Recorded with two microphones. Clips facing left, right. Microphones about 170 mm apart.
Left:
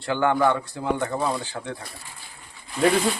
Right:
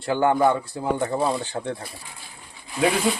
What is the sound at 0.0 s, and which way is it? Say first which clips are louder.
A man's voice: right 2 dB; 30° right (ahead or behind).